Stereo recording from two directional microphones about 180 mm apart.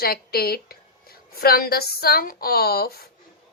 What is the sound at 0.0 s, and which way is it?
A woman's voice, 60° left (ahead or behind).